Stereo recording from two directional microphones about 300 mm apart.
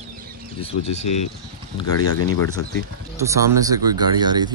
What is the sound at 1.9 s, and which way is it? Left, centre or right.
Speech, left.